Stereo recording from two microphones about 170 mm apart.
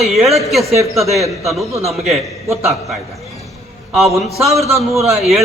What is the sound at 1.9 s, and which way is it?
Speech, centre (ahead or behind).